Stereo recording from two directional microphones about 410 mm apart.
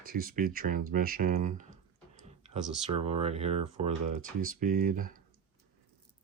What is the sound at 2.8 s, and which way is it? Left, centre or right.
Speech, centre.